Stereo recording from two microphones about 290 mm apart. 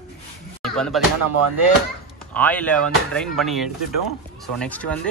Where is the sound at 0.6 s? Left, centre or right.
Centre.